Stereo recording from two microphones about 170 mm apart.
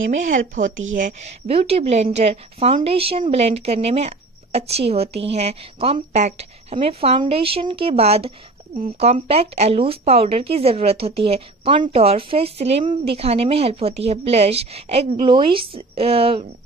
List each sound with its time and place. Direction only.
0.1 s speech: 45° right (ahead or behind)
1.5 s a woman's voice: 35° right (ahead or behind)